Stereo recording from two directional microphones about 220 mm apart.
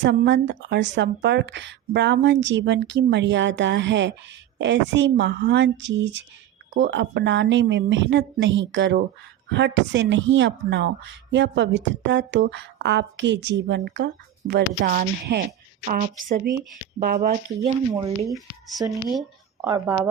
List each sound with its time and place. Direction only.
0.0 s a woman's voice: 55° right (ahead or behind); by 17.7 s 35° right (ahead or behind)
18.8 s a woman's voice: 10° right (ahead or behind)